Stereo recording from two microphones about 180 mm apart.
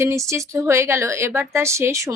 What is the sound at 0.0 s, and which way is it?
A woman's voice, 15° right (ahead or behind).